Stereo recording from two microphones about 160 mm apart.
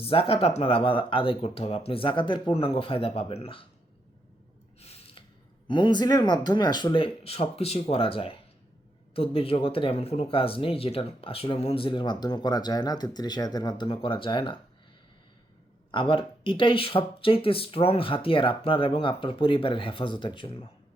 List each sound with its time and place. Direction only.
0.0 s speech: 35° left (ahead or behind)
4.8 s a sound: 40° left (ahead or behind)
5.6 s speech: 30° left (ahead or behind)
15.9 s speech: 30° left (ahead or behind)